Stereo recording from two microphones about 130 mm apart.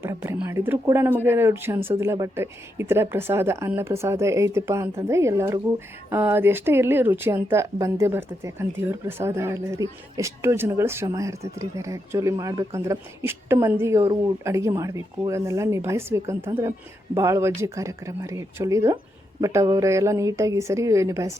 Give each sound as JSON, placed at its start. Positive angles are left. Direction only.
{"t": 0.0, "sound": "speech", "side_deg": -20}